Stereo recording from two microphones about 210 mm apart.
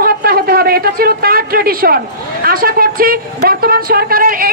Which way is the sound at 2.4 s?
45° right (ahead or behind).